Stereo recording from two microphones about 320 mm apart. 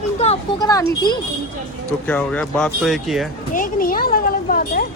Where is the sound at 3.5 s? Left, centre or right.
Left.